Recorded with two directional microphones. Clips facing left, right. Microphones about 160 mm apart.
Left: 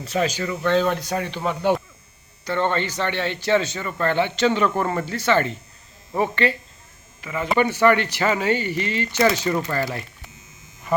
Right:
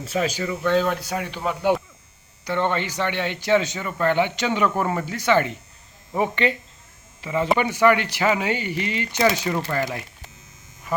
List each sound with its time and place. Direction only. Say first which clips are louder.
0.0 s speech: left 1 dB; 5° right (ahead or behind)
2.4 s speech: left 1 dB; 15° right (ahead or behind)
7.2 s speech: right 4 dB; 30° right (ahead or behind)
7.5 s speech: left 1 dB; 10° right (ahead or behind)